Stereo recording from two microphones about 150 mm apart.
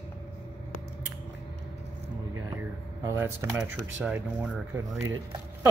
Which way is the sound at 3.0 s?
15° right (ahead or behind).